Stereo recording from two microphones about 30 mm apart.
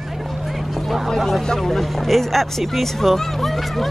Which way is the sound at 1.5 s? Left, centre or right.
Centre.